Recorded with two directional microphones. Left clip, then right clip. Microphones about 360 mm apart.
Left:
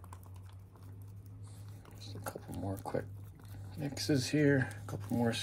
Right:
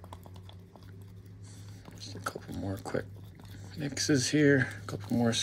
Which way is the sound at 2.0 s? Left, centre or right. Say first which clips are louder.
Right 6 dB; centre.